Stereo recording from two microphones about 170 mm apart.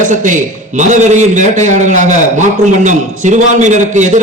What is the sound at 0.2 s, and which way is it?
A man's voice, 45° right (ahead or behind).